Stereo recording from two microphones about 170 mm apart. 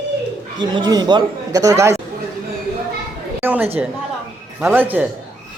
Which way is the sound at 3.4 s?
10° right (ahead or behind).